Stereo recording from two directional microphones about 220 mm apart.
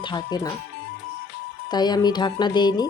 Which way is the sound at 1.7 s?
20° left (ahead or behind).